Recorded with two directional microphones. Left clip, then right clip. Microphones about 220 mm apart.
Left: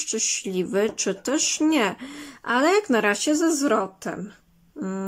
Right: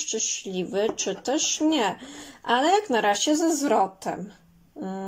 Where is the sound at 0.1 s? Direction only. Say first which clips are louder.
Left 4 dB; 30° left (ahead or behind).